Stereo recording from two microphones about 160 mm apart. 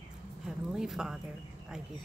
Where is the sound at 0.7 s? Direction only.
5° right (ahead or behind).